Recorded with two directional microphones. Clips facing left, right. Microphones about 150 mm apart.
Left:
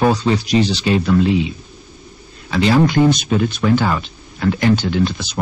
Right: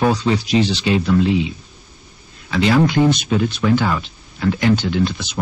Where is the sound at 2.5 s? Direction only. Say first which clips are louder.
Left 1 dB; 35° left (ahead or behind).